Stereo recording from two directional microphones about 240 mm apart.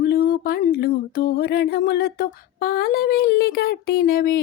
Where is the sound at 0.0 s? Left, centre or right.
Left.